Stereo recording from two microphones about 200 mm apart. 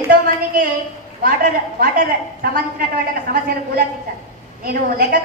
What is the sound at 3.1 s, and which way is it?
A woman's voice, 50° right (ahead or behind).